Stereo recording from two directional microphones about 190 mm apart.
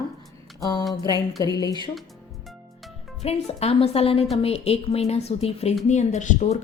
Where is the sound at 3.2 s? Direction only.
35° left (ahead or behind).